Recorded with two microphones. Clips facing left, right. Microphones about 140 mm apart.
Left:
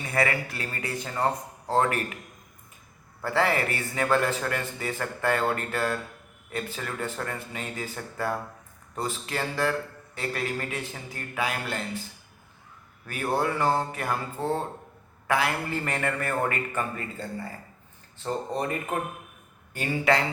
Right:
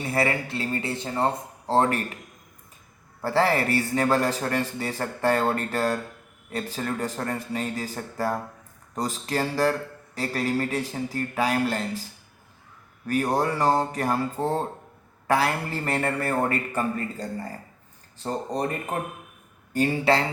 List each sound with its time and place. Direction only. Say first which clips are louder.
0.0 s speech: right 2 dB; 30° right (ahead or behind)
3.2 s a man's voice: right 3 dB; 35° right (ahead or behind)
13.1 s a man's voice: right 3 dB; 35° right (ahead or behind)
19.7 s a man's voice: right 3 dB; 35° right (ahead or behind)